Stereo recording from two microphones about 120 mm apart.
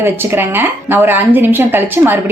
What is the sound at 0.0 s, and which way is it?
A woman's voice, 20° right (ahead or behind).